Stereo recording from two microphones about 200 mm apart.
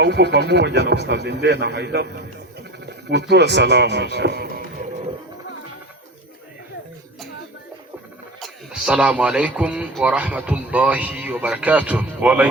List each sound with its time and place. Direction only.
0.0 s speech: 60° right (ahead or behind)
3.1 s speech: 60° right (ahead or behind)
8.4 s speech: 5° right (ahead or behind)